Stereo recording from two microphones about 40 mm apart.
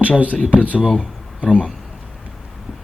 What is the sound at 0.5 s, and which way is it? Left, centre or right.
Speech, right.